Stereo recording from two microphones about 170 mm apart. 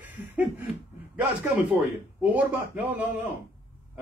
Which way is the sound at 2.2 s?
10° right (ahead or behind).